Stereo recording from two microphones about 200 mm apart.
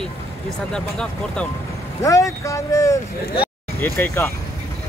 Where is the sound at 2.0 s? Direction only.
15° left (ahead or behind).